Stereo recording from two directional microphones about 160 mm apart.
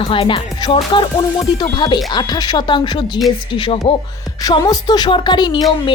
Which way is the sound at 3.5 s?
35° left (ahead or behind).